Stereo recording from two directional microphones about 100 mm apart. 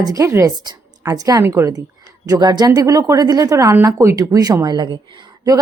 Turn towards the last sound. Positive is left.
turn(degrees=-45)  # may be behind; listen again after turning